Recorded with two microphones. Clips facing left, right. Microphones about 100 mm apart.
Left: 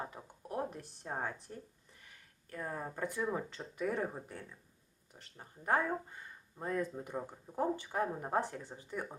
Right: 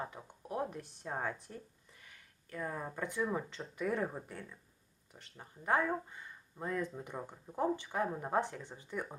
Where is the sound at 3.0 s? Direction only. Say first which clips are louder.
Right 1 dB; 40° left (ahead or behind).